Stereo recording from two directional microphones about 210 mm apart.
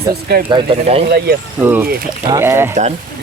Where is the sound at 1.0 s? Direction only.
50° right (ahead or behind).